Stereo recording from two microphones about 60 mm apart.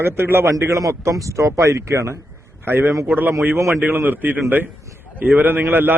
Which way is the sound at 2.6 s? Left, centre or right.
Right.